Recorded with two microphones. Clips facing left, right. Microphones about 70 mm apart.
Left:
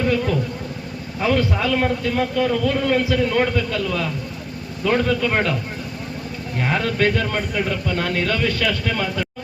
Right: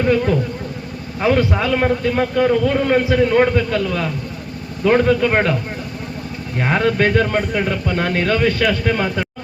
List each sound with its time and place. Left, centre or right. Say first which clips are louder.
1.2 s a man's voice: right 3 dB; right
6.6 s a man's voice: right 4 dB; right